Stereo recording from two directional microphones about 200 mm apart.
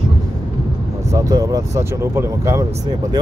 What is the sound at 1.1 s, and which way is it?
Speech, 15° right (ahead or behind).